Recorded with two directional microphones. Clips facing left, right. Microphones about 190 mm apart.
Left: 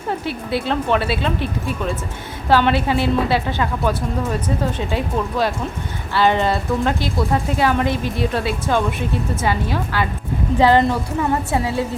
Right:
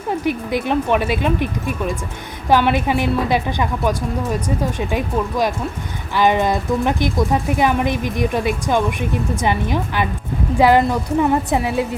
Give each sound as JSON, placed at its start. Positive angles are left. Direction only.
{"t": 0.1, "sound": "speech", "side_deg": -15}